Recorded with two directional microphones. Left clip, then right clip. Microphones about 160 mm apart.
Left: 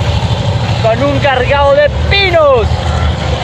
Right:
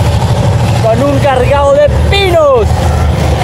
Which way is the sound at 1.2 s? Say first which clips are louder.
Even; 15° right (ahead or behind).